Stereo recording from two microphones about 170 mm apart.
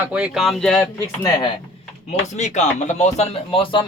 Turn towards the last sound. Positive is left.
turn(degrees=30)  # may be behind; listen again after turning